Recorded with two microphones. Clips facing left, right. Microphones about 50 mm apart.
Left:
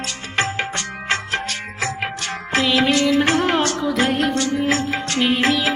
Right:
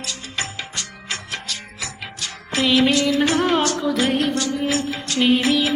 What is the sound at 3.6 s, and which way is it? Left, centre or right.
Music of bollywood, left.